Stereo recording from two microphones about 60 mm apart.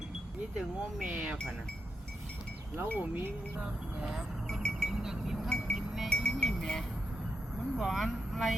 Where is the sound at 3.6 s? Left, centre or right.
Centre.